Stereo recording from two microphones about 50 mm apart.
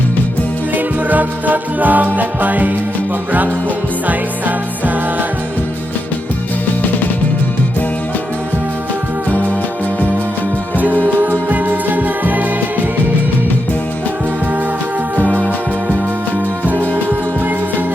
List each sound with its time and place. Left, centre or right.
1.1 s music: right
10.8 s music: right